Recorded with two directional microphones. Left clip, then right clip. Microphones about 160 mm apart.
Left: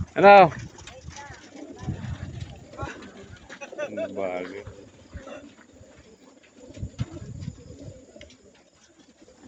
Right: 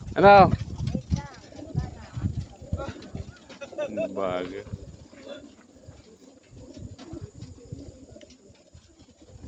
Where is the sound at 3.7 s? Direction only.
60° right (ahead or behind).